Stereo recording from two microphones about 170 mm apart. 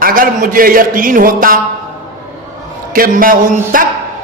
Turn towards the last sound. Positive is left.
turn(degrees=-55)  # may be behind; listen again after turning